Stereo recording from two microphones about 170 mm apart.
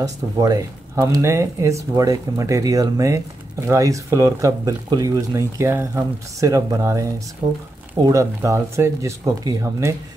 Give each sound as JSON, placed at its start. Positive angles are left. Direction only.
{"t": 0.0, "sound": "speech", "side_deg": -20}
{"t": 7.4, "sound": "speech", "side_deg": -35}
{"t": 7.9, "sound": "speech", "side_deg": -20}